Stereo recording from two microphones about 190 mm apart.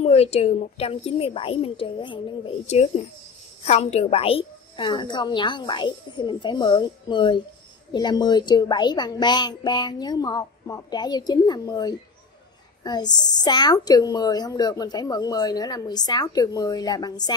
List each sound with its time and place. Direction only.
0.0 s a woman's voice: 35° left (ahead or behind)